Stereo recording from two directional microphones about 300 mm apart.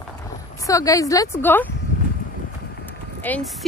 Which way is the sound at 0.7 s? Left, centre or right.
Centre.